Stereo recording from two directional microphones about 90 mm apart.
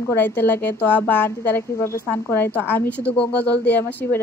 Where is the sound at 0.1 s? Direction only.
20° left (ahead or behind).